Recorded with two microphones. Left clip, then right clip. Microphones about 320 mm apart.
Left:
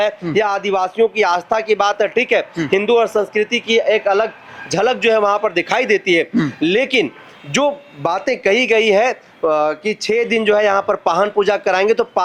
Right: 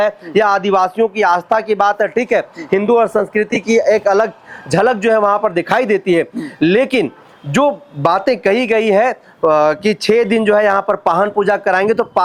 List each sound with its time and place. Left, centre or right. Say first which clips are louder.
0.0 s speech: right 3 dB; right
6.1 s speech: even; right
7.5 s speech: right 3 dB; right